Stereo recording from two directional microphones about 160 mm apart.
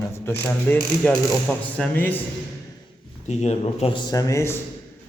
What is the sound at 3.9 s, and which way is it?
Speech, 25° left (ahead or behind).